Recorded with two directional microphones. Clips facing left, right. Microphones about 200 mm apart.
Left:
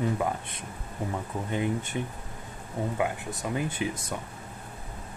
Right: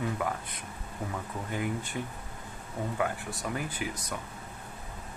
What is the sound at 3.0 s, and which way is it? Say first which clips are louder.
Speech: left 2 dB; 20° left (ahead or behind).